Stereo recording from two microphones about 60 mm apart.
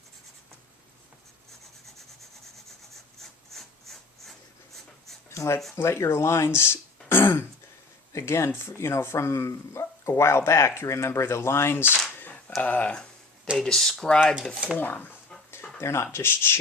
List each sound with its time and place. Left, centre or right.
3.2 s wood: centre
5.3 s a sound: left
5.7 s speech: left
7.1 s throat clearing: left
8.1 s speech: left
12.1 s a sound: left
12.6 s speech: left
12.9 s a sound: centre
13.6 s speech: centre
14.8 s speech: left
15.8 s speech: left